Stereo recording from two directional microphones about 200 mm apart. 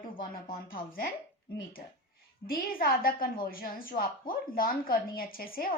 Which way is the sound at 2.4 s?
45° left (ahead or behind).